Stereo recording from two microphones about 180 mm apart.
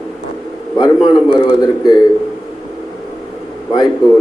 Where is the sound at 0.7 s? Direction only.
25° left (ahead or behind).